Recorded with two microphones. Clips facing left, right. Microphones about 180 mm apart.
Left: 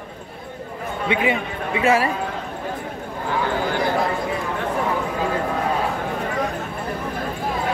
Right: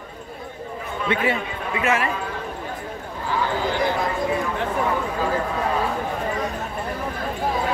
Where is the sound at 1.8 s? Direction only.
30° left (ahead or behind).